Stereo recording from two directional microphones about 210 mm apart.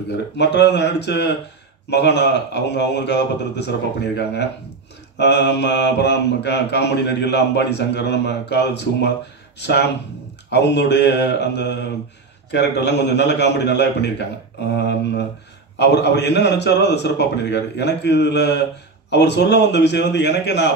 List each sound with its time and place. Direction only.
0.4 s mantra: 55° left (ahead or behind)
4.2 s a man's voice: 55° left (ahead or behind)
5.1 s mantra: 55° left (ahead or behind)
14.8 s a man's voice: 55° left (ahead or behind)
19.0 s mantra: 55° left (ahead or behind)